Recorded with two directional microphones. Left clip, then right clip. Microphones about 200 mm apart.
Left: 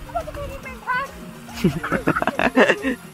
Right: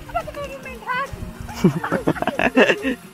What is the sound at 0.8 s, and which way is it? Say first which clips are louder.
Music: left 1 dB; 35° right (ahead or behind).